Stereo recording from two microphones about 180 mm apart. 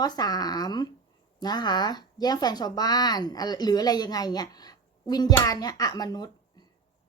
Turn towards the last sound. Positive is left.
turn(degrees=20)  # may be behind; listen again after turning